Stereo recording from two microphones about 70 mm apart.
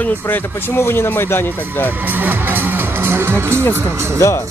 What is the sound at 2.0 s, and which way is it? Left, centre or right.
Speech, right.